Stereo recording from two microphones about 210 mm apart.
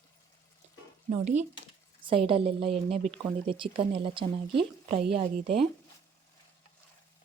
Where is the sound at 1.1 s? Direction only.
35° right (ahead or behind).